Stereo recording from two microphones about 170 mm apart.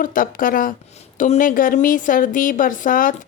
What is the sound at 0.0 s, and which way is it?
A woman's voice, 55° left (ahead or behind).